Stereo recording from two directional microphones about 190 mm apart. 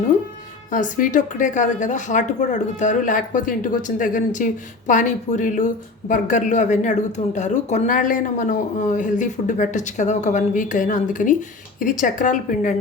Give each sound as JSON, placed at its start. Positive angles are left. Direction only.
{"t": 0.7, "sound": "a woman's voice", "side_deg": 45}